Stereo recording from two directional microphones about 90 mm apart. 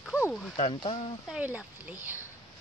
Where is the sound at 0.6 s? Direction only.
90° left.